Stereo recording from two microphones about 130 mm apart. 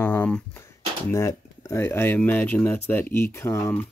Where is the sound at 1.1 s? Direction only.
20° left (ahead or behind).